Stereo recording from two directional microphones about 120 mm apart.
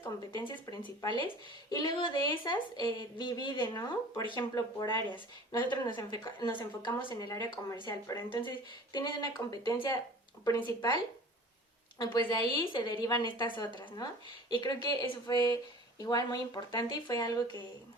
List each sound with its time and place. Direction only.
0.3 s a woman's voice: 35° left (ahead or behind)